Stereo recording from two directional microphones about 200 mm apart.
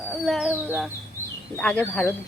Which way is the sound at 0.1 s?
Centre (ahead or behind).